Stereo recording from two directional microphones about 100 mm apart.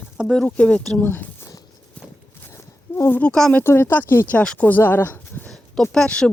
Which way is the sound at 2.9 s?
25° left (ahead or behind).